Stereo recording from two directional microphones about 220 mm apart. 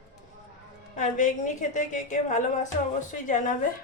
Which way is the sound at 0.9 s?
35° left (ahead or behind).